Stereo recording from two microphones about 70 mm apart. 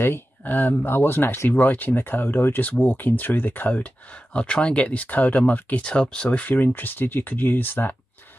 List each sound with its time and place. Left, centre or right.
0.0 s speech: left